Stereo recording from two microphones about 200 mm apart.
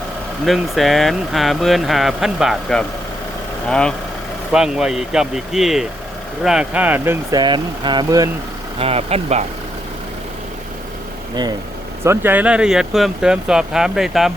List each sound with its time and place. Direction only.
0.4 s speech: centre (ahead or behind); by 8.3 s 20° right (ahead or behind)
8.8 s speech: 30° right (ahead or behind)
12.0 s speech: 10° right (ahead or behind)